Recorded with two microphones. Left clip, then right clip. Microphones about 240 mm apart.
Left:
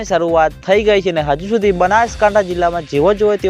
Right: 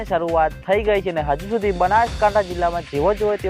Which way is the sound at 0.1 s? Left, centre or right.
Left.